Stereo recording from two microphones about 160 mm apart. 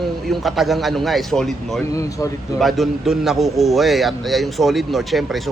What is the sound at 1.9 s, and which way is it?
Speech, 20° left (ahead or behind).